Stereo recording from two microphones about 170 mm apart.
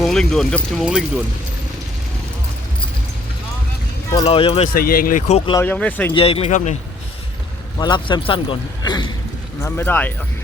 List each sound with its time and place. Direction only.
0.0 s speech: centre (ahead or behind)
4.3 s speech: 35° left (ahead or behind)
4.7 s speech: 60° left (ahead or behind)
5.5 s speech: 10° left (ahead or behind)
6.1 s speech: 35° left (ahead or behind)
7.8 s speech: 25° left (ahead or behind)
9.6 s speech: 10° left (ahead or behind)